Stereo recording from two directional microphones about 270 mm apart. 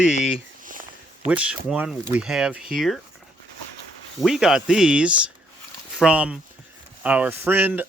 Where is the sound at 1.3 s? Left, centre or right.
Centre.